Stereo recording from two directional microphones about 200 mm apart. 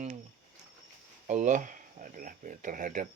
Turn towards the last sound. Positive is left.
turn(degrees=-40)  # may be behind; listen again after turning